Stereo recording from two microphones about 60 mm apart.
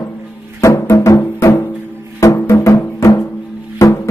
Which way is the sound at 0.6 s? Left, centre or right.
Left.